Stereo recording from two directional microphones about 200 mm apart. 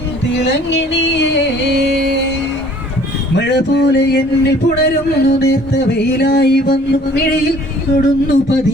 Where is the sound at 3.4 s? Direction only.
55° left (ahead or behind).